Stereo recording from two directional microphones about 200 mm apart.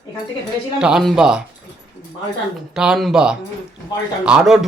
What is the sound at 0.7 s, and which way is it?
Speech, 5° right (ahead or behind).